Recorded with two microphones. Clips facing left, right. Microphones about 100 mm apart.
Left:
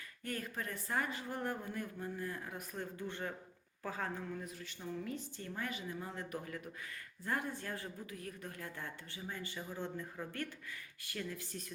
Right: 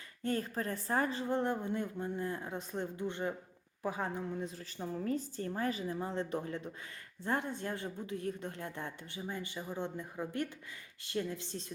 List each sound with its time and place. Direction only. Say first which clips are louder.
0.2 s a woman's voice: right 7 dB; 30° right (ahead or behind)